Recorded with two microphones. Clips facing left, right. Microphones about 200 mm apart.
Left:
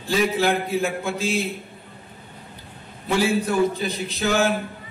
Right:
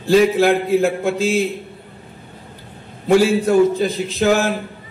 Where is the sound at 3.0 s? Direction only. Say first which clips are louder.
Right 7 dB; 45° right (ahead or behind).